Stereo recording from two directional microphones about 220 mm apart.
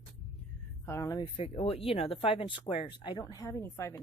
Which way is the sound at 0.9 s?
15° left (ahead or behind).